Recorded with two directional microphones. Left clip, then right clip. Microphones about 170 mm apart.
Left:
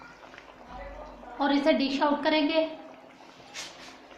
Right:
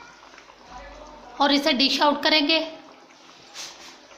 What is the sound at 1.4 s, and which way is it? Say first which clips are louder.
A woman's voice: right 5 dB; 60° right (ahead or behind).